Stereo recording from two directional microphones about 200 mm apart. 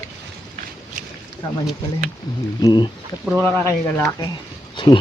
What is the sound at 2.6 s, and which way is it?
Speech, 25° left (ahead or behind).